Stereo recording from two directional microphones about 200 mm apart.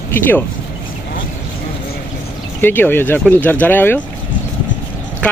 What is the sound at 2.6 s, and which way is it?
Speech, 10° left (ahead or behind).